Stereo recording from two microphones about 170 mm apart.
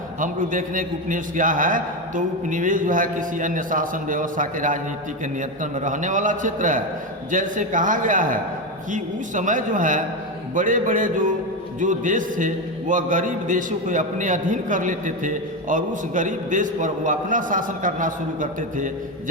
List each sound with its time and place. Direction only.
0.2 s a man's voice: 50° right (ahead or behind)